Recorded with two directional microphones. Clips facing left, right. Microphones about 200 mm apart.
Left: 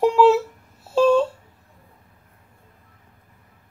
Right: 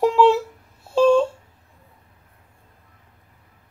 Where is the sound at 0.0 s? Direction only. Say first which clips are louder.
Left 1 dB; centre (ahead or behind).